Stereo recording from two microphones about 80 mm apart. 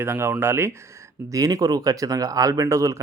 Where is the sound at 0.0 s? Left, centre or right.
Right.